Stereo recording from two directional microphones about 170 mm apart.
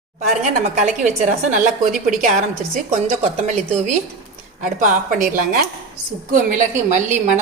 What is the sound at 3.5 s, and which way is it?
Speech, 40° right (ahead or behind).